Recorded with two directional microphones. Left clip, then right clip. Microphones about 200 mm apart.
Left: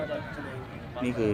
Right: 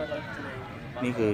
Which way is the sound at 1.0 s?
Centre (ahead or behind).